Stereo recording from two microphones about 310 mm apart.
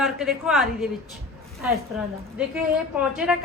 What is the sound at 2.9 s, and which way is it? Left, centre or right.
Speech, centre.